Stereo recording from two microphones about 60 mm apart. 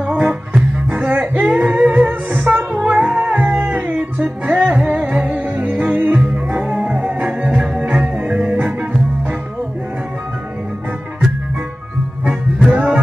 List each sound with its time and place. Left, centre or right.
0.0 s music: centre; by 2.8 s right
2.8 s music: centre
3.1 s music: right
12.3 s music: right